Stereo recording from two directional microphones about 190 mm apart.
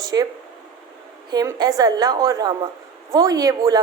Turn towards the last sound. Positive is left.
turn(degrees=-20)  # may be behind; listen again after turning